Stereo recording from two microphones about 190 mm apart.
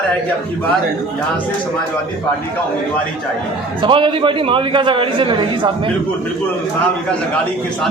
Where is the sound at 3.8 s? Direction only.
25° right (ahead or behind).